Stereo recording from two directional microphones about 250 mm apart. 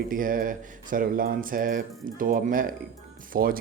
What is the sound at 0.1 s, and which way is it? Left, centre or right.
Speech, right.